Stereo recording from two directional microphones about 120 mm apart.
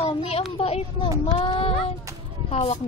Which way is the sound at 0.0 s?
60° left (ahead or behind).